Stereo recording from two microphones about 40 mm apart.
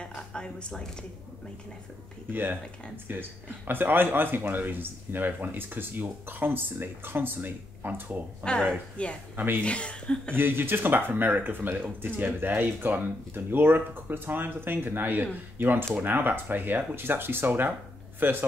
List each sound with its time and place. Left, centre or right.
0.0 s a sound: left
3.1 s speech: right
8.4 s speech: left
10.3 s speech: right